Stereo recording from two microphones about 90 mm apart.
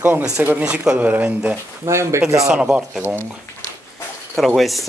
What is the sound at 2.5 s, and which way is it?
Speech, 5° right (ahead or behind).